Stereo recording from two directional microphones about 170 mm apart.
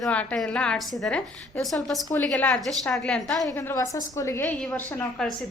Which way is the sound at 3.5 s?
20° left (ahead or behind).